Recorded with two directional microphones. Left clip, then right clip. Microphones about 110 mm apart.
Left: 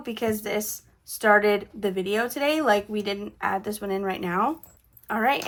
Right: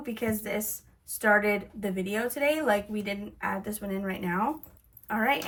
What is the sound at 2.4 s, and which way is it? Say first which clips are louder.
A woman's voice: left 3 dB; 45° left (ahead or behind).